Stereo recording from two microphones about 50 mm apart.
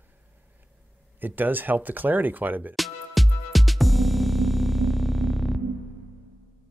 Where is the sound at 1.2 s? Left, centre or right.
Right.